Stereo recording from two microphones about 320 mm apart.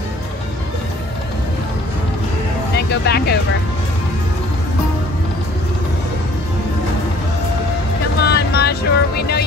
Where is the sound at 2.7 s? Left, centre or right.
Left.